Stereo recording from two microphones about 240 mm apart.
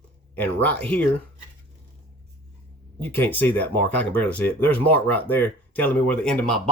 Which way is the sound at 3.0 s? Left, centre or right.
Centre.